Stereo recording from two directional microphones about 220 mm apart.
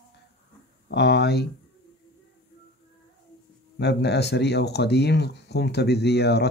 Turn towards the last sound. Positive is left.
turn(degrees=50)  # may be behind; listen again after turning